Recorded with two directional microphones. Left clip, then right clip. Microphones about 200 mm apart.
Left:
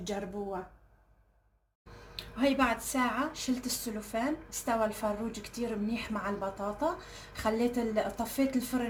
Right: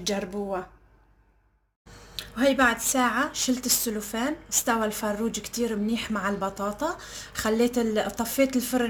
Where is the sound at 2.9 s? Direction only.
40° right (ahead or behind).